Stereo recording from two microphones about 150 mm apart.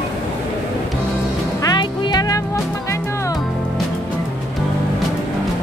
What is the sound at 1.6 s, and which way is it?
Music, 30° left (ahead or behind).